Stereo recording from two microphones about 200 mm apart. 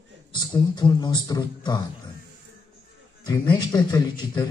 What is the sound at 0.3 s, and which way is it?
A man's voice, 20° left (ahead or behind).